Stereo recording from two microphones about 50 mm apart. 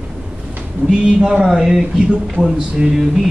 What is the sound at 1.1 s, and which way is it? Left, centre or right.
Speech, centre.